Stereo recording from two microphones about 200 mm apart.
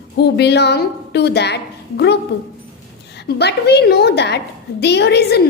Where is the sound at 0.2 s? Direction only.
55° left (ahead or behind).